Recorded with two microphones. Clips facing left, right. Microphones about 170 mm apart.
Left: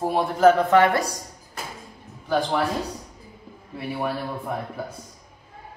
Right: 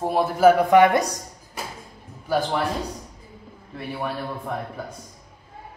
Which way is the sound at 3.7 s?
5° left (ahead or behind).